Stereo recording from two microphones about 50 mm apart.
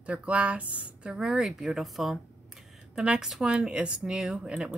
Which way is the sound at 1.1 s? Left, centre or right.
Centre.